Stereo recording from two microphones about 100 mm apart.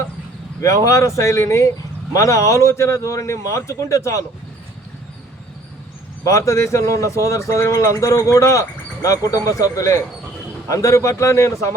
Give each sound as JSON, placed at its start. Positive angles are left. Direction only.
{"t": 0.6, "sound": "speech", "side_deg": 30}
{"t": 6.2, "sound": "speech", "side_deg": 35}